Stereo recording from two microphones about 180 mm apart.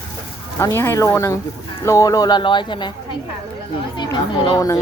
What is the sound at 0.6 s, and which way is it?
Speech, 15° left (ahead or behind).